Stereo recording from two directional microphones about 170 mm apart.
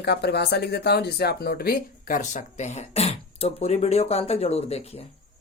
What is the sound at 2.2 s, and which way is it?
Speech, 45° left (ahead or behind).